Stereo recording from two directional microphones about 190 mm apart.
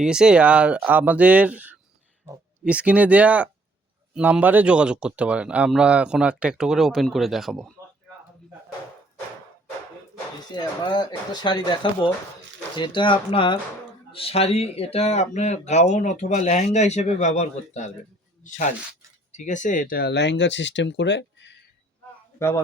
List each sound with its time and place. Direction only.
0.0 s speech: 5° right (ahead or behind)
10.5 s speech: 25° left (ahead or behind); by 21.5 s 70° left (ahead or behind)
22.4 s a man's voice: 15° left (ahead or behind)